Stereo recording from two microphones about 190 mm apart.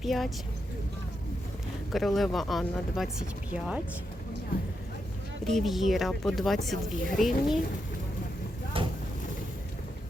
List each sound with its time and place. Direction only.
0.0 s speech: centre (ahead or behind)
1.9 s speech: centre (ahead or behind)
5.5 s speech: centre (ahead or behind)
8.8 s vehicle: 25° right (ahead or behind)